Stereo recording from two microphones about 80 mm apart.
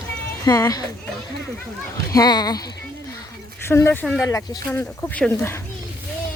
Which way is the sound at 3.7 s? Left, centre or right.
Left.